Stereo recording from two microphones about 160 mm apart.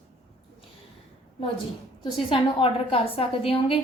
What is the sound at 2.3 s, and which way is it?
A woman's voice, 35° left (ahead or behind).